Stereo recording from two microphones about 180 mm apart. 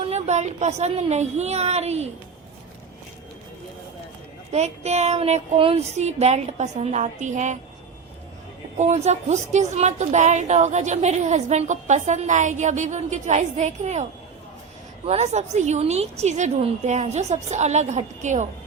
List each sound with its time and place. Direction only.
0.0 s a woman's voice: 35° right (ahead or behind)
4.5 s a woman's voice: 40° right (ahead or behind)
8.8 s a woman's voice: 40° right (ahead or behind)